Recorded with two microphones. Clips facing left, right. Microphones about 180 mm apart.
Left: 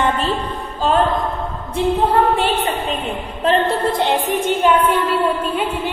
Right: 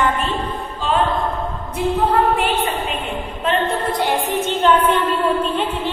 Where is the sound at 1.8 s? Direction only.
30° left (ahead or behind).